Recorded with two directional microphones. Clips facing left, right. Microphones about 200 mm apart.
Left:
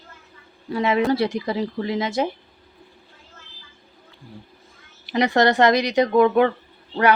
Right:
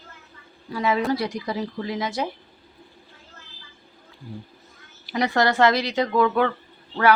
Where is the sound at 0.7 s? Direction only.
25° left (ahead or behind).